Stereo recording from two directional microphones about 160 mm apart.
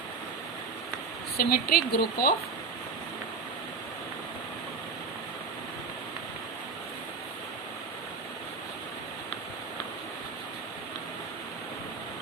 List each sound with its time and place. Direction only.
1.4 s speech: 70° left (ahead or behind)